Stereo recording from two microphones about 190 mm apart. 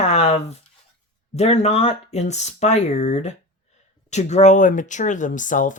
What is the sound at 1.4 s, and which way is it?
Speech, 35° left (ahead or behind).